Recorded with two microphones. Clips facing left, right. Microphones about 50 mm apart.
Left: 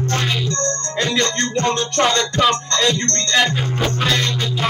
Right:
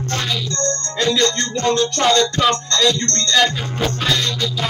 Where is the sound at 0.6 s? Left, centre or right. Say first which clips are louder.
Right 2 dB; left.